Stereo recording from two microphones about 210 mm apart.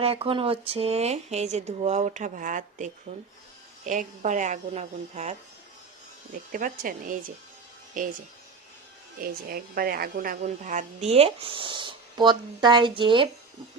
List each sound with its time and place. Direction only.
0.0 s speech: 25° right (ahead or behind)
6.5 s speech: 40° right (ahead or behind)
9.2 s speech: 45° right (ahead or behind); by 13.2 s 25° right (ahead or behind)